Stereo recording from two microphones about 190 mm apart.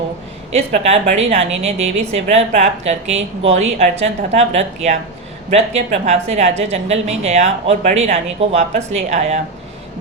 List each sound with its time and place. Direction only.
0.5 s a woman's voice: 35° right (ahead or behind)